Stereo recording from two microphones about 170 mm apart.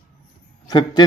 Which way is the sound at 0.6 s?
25° left (ahead or behind).